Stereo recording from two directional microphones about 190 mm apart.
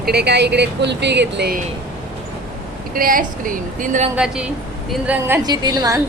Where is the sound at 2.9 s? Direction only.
45° right (ahead or behind).